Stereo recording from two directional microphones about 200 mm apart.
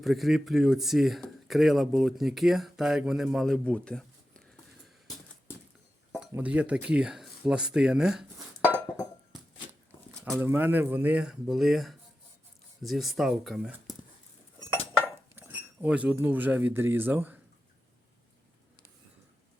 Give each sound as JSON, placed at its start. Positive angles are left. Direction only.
{"t": 0.0, "sound": "speech", "side_deg": 0}
{"t": 6.1, "sound": "speech", "side_deg": -5}
{"t": 10.2, "sound": "speech", "side_deg": -10}
{"t": 15.0, "sound": "cutlery", "side_deg": -10}